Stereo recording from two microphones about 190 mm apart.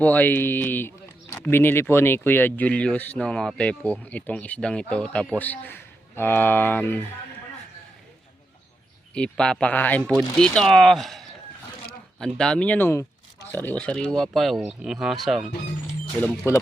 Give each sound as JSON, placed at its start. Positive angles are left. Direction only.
{"t": 0.0, "sound": "speech", "side_deg": 10}
{"t": 9.1, "sound": "speech", "side_deg": 5}